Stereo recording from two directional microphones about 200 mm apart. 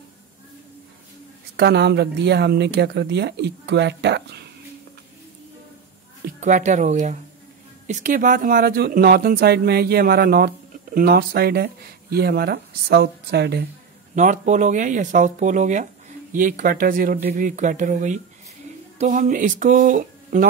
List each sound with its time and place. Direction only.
1.6 s speech: 55° right (ahead or behind)
6.4 s speech: 40° right (ahead or behind); by 13.7 s 55° right (ahead or behind)
14.1 s speech: 35° right (ahead or behind)